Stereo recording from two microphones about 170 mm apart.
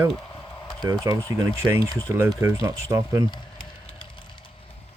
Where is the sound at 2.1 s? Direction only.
15° right (ahead or behind).